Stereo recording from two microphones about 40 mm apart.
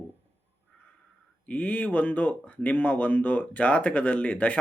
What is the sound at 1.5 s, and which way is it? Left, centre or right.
Speech, left.